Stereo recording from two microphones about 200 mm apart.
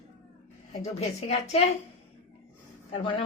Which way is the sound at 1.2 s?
30° left (ahead or behind).